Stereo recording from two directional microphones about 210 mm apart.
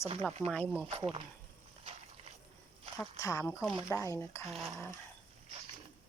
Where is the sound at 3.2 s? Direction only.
15° left (ahead or behind).